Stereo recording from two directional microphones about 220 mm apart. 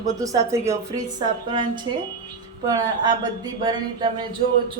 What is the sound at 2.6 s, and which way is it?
Speech, 15° right (ahead or behind).